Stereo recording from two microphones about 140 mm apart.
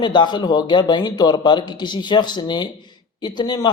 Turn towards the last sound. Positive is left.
turn(degrees=30)  # may be behind; listen again after turning